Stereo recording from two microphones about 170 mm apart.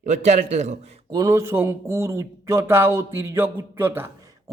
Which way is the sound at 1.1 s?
20° right (ahead or behind).